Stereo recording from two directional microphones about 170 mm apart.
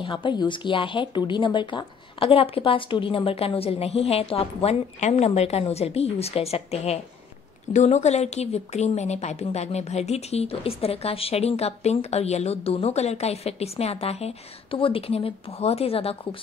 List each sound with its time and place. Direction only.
0.0 s a woman's voice: 30° left (ahead or behind)